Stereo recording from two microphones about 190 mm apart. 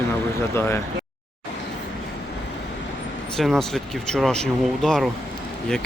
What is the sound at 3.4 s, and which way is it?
Speech, centre (ahead or behind).